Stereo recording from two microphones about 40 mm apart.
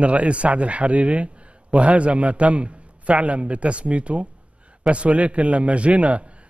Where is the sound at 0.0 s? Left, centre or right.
Right.